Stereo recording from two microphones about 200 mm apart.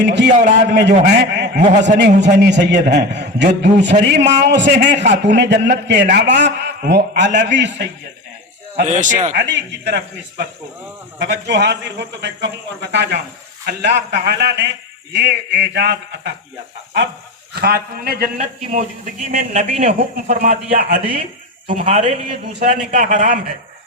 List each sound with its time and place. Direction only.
0.0 s a man's voice: 60° right (ahead or behind)
0.3 s a man's voice: 45° right (ahead or behind)
8.8 s a man's voice: 35° right (ahead or behind)
9.3 s a man's voice: 60° right (ahead or behind)
17.5 s a man's voice: 50° right (ahead or behind)
18.3 s a man's voice: 35° right (ahead or behind)